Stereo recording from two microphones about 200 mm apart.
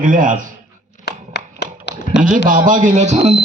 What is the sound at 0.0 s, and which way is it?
Speech, 40° right (ahead or behind).